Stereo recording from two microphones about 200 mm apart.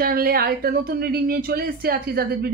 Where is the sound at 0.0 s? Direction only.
50° right (ahead or behind).